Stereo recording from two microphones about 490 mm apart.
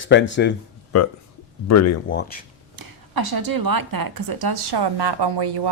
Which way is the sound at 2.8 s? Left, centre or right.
Right.